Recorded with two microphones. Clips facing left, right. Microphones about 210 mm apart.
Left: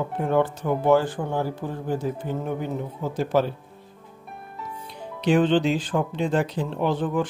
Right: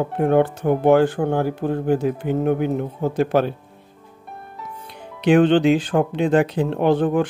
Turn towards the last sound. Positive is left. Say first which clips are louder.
# right 6 dB
turn(degrees=-65)  # may be behind; listen again after turning